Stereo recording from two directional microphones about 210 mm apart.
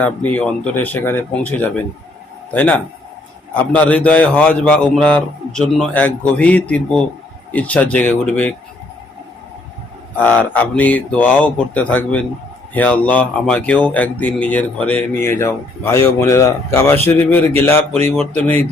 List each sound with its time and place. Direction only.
0.0 s a man's voice: 5° left (ahead or behind)
10.2 s speech: 5° left (ahead or behind)